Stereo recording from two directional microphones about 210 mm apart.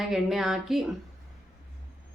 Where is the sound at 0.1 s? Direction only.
Centre (ahead or behind).